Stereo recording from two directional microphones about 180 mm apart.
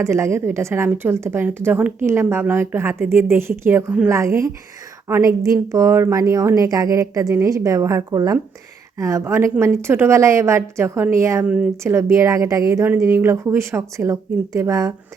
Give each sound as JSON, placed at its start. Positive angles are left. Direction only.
{"t": 0.0, "sound": "a woman's voice", "side_deg": -15}